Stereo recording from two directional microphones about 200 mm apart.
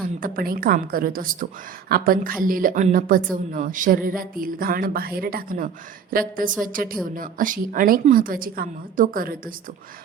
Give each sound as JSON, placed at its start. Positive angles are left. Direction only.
{"t": 0.2, "sound": "a woman's voice", "side_deg": -45}